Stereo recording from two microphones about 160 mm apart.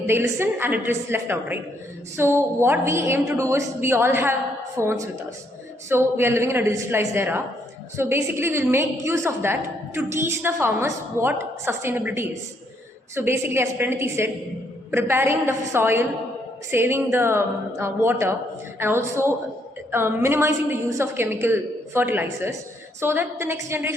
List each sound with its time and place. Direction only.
0.1 s a woman's voice: 15° right (ahead or behind)